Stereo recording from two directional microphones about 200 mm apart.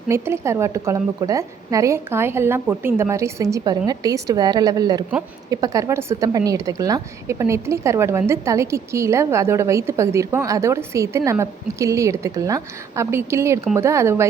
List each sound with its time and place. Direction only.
0.1 s a woman's voice: 15° right (ahead or behind)